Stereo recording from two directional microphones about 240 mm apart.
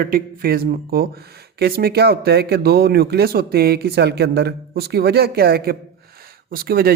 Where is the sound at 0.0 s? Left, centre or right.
Right.